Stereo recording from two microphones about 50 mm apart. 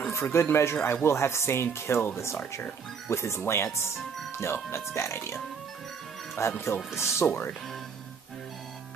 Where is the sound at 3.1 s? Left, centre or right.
Left.